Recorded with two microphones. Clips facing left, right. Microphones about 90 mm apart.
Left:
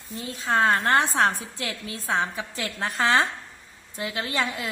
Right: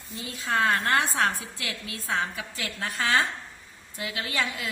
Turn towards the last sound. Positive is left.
turn(degrees=30)  # may be behind; listen again after turning